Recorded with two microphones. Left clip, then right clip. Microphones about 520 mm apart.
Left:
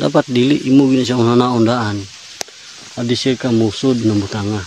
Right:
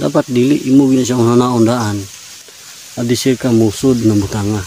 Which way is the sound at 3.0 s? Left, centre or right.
Left.